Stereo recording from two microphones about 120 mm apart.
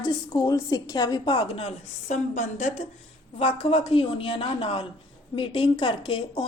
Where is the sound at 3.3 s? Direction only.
55° left (ahead or behind).